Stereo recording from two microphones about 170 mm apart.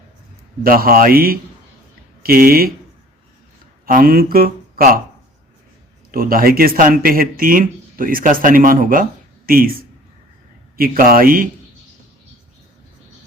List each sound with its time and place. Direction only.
0.6 s speech: 60° right (ahead or behind)
3.8 s speech: 55° right (ahead or behind)
6.1 s speech: 60° right (ahead or behind)